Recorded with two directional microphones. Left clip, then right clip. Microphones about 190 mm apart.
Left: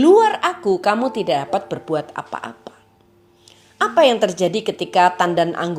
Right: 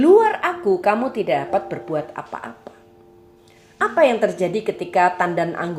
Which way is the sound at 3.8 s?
35° left (ahead or behind).